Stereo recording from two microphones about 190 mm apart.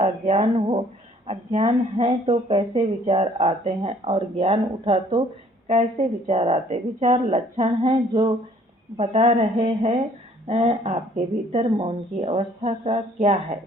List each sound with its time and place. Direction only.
0.0 s speech: 35° right (ahead or behind)